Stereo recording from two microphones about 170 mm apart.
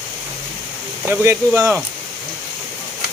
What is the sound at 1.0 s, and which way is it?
Speech, 15° right (ahead or behind).